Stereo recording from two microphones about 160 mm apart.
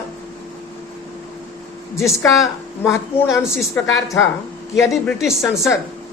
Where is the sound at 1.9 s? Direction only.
20° left (ahead or behind).